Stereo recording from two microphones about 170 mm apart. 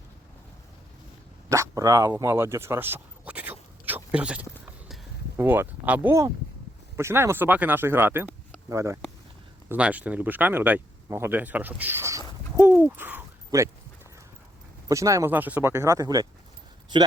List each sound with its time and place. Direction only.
1.5 s dog: 20° right (ahead or behind)
5.4 s speech: 10° right (ahead or behind)
12.5 s owl: 10° right (ahead or behind)
14.8 s speech: 20° right (ahead or behind)